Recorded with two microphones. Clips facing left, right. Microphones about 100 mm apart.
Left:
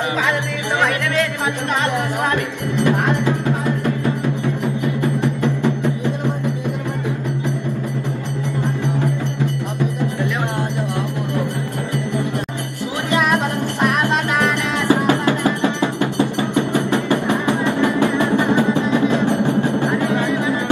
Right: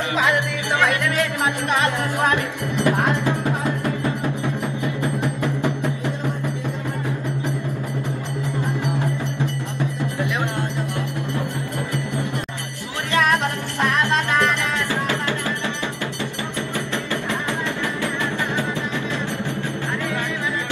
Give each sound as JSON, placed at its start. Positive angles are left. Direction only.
{"t": 13.1, "sound": "music", "side_deg": 15}